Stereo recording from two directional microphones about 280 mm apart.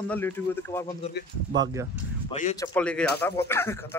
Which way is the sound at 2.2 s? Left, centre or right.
Left.